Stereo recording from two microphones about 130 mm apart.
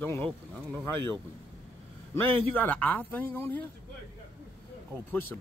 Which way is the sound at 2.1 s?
15° left (ahead or behind).